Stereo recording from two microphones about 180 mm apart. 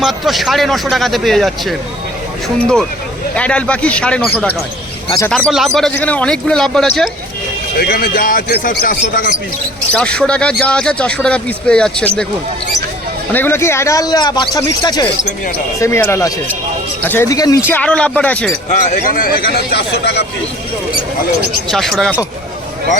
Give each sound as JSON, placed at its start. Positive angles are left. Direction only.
{"t": 0.0, "sound": "speech", "side_deg": 0}
{"t": 5.3, "sound": "speech", "side_deg": 0}
{"t": 7.8, "sound": "speech", "side_deg": 55}
{"t": 9.9, "sound": "speech", "side_deg": 5}
{"t": 13.3, "sound": "speech", "side_deg": 10}
{"t": 17.7, "sound": "speech", "side_deg": 10}
{"t": 18.7, "sound": "a man's voice", "side_deg": 45}
{"t": 21.7, "sound": "speech", "side_deg": 0}